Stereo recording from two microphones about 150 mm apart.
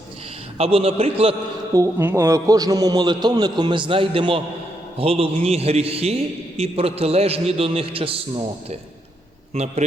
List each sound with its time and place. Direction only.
0.6 s a man's voice: 40° right (ahead or behind)
1.7 s a man's voice: 20° right (ahead or behind); by 8.4 s 40° right (ahead or behind)
9.5 s a man's voice: 45° right (ahead or behind)